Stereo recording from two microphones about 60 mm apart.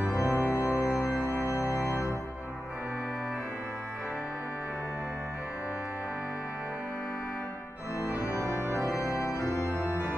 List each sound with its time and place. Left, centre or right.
0.1 s organ: left
1.3 s organ: right
1.7 s music: left
8.1 s organ: right
9.1 s organ: left